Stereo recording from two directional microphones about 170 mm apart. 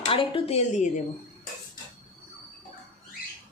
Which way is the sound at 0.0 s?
30° left (ahead or behind).